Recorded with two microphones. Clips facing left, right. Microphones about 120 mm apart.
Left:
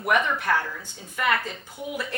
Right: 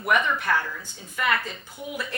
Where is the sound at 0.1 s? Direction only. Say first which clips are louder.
Even; 45° left (ahead or behind).